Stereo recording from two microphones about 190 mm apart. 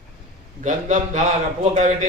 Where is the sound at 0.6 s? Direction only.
40° right (ahead or behind).